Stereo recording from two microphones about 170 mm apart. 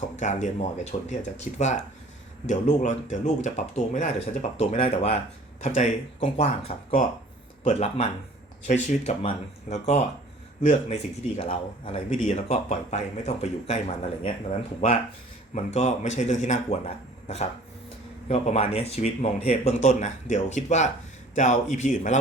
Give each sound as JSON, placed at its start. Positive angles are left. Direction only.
{"t": 0.2, "sound": "speech", "side_deg": 45}
{"t": 15.5, "sound": "speech", "side_deg": 45}